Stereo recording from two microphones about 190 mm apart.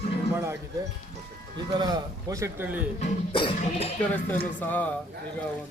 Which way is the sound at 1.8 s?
15° right (ahead or behind).